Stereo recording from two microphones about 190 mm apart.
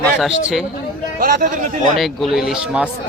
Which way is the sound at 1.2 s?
50° right (ahead or behind).